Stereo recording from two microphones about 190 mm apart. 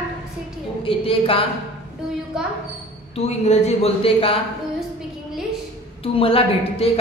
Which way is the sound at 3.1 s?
35° left (ahead or behind).